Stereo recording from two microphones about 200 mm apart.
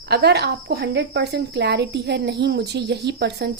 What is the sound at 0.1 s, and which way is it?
A woman's voice, 55° right (ahead or behind).